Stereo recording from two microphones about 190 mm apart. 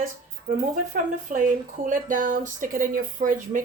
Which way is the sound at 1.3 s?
45° right (ahead or behind).